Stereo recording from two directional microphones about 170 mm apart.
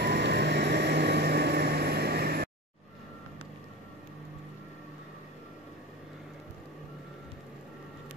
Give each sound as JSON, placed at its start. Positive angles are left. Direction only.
{"t": 0.0, "sound": "vehicle", "side_deg": -80}